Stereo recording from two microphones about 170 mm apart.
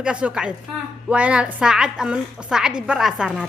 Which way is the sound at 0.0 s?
5° right (ahead or behind).